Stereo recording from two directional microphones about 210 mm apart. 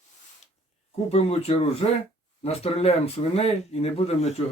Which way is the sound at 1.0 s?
30° left (ahead or behind).